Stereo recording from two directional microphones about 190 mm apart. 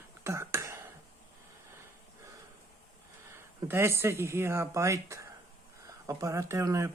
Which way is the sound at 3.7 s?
10° right (ahead or behind).